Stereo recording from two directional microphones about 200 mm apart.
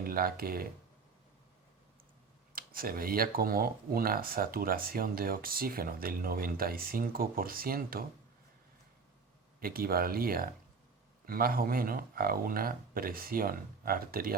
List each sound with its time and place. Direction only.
0.0 s speech: 45° right (ahead or behind)
2.6 s speech: 45° right (ahead or behind)
9.6 s speech: 50° right (ahead or behind)